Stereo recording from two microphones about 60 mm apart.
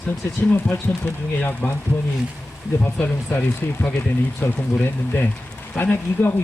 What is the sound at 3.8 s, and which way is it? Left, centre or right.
Speech, left.